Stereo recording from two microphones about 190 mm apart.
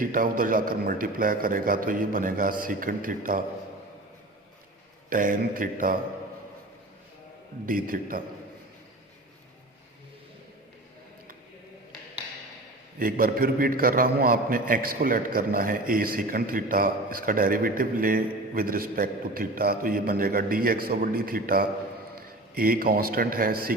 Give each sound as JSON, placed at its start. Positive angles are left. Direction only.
{"t": 0.0, "sound": "a man's voice", "side_deg": -45}
{"t": 5.0, "sound": "a man's voice", "side_deg": -45}
{"t": 7.7, "sound": "a man's voice", "side_deg": -45}
{"t": 13.0, "sound": "a man's voice", "side_deg": -50}